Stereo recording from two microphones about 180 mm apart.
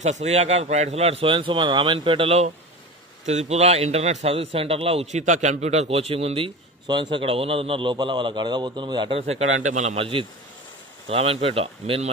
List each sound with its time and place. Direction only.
0.0 s a man's voice: 40° right (ahead or behind)